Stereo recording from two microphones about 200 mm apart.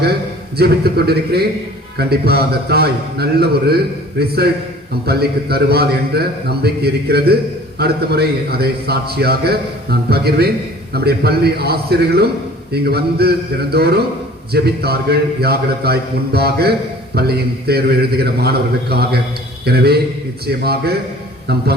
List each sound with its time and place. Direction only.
0.5 s a man's voice: 50° right (ahead or behind)